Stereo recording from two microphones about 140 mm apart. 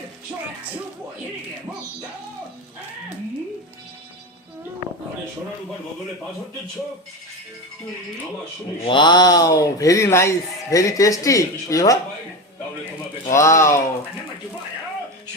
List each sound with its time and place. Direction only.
8.8 s speech: 35° left (ahead or behind)
13.3 s speech: 20° left (ahead or behind)